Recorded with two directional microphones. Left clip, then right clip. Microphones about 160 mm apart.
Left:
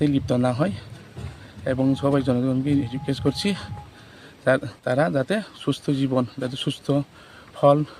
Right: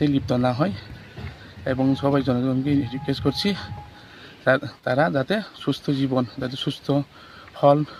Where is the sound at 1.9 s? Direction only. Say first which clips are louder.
Even; 40° left (ahead or behind).